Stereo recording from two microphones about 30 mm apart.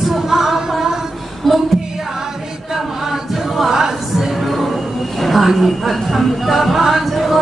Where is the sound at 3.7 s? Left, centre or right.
Centre.